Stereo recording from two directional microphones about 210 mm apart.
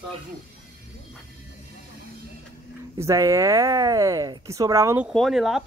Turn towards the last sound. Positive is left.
turn(degrees=0)  # may be behind; listen again after turning